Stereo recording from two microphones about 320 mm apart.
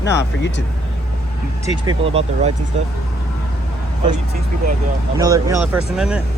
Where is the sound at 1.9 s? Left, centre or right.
Centre.